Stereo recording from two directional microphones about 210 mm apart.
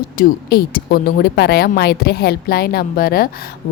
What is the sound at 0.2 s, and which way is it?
A woman's voice, 45° left (ahead or behind).